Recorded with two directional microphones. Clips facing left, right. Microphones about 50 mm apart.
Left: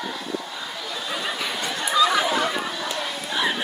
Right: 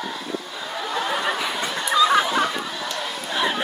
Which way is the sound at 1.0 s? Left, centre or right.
Right.